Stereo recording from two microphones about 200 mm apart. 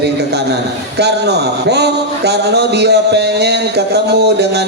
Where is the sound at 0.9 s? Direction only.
55° right (ahead or behind).